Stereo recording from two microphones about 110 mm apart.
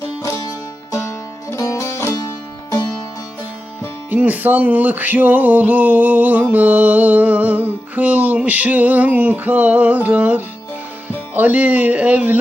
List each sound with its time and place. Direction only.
1.5 s music: 25° left (ahead or behind)
4.1 s music: 15° right (ahead or behind)